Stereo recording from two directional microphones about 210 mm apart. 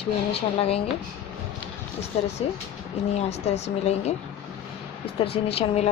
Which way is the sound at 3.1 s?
30° left (ahead or behind).